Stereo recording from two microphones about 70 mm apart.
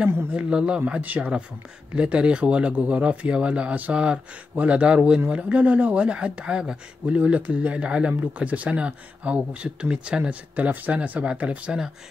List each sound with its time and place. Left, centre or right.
0.3 s speech: centre